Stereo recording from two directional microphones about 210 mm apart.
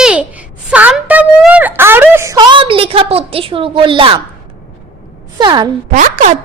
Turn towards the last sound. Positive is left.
turn(degrees=-35)  # may be behind; listen again after turning